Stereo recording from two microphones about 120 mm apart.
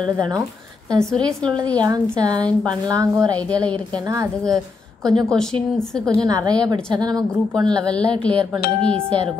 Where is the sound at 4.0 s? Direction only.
30° right (ahead or behind).